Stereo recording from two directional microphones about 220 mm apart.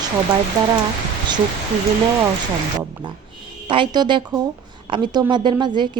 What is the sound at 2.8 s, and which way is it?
A woman's voice, 20° right (ahead or behind).